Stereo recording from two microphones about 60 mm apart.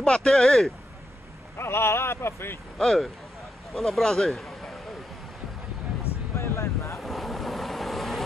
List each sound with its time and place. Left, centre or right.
0.0 s speech: centre
1.6 s speech: left
2.8 s speech: centre
6.3 s vehicle: left
7.0 s boat: centre